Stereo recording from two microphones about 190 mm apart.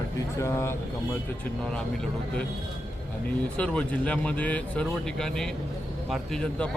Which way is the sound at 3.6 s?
5° left (ahead or behind).